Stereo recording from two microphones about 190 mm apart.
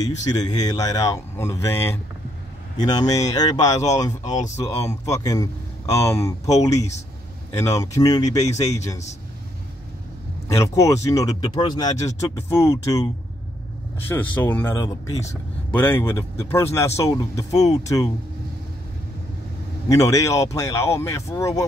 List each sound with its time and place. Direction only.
0.4 s speech: 20° left (ahead or behind)
10.6 s speech: 15° left (ahead or behind)
19.9 s speech: 15° left (ahead or behind)